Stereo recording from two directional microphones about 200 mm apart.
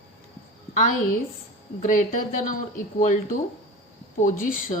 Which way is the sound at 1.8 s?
40° left (ahead or behind).